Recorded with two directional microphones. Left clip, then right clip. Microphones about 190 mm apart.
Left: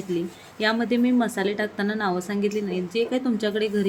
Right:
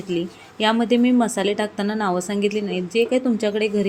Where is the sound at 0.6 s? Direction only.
15° right (ahead or behind).